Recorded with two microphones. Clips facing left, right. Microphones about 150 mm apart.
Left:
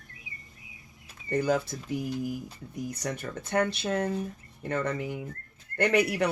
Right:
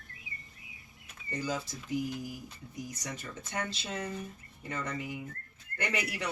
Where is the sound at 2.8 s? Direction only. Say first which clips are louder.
Left 10 dB; 60° left (ahead or behind).